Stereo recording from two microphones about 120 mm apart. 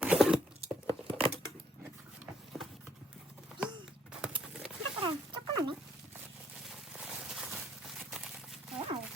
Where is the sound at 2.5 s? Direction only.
Centre (ahead or behind).